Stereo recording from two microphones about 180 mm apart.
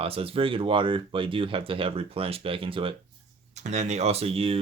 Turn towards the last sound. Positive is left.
turn(degrees=-30)  # may be behind; listen again after turning